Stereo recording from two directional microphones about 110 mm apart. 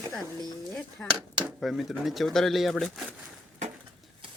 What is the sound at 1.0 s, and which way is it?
Speech, 10° left (ahead or behind).